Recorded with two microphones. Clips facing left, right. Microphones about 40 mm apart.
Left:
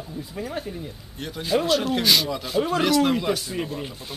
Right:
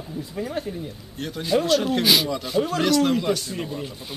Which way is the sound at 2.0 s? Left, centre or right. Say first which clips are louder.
Right 1 dB; centre.